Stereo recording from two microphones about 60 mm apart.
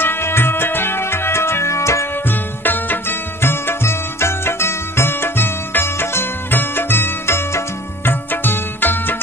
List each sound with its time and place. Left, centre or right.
0.0 s music: left
2.2 s music: left